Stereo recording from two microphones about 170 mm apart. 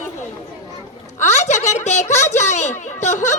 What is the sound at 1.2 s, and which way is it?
Speech, 45° left (ahead or behind).